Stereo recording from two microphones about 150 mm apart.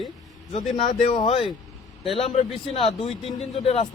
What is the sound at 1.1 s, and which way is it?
Speech, 35° left (ahead or behind).